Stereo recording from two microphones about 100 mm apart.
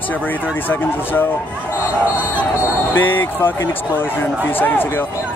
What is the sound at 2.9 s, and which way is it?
Speech, 20° left (ahead or behind).